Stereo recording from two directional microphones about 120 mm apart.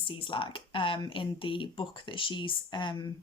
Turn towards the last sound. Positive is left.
turn(degrees=40)  # may be behind; listen again after turning